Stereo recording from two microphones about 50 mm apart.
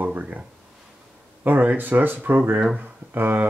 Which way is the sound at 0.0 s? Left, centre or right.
Right.